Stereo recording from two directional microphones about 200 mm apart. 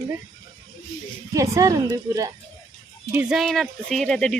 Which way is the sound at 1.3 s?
15° right (ahead or behind).